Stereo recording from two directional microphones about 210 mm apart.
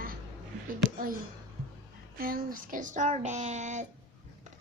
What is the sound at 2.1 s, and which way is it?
A woman's voice, 45° right (ahead or behind).